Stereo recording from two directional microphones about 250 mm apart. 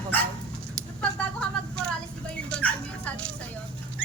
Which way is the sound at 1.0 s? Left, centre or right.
Centre.